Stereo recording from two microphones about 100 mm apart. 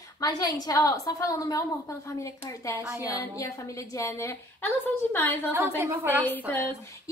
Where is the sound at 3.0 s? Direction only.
35° left (ahead or behind); by 5.4 s 20° left (ahead or behind).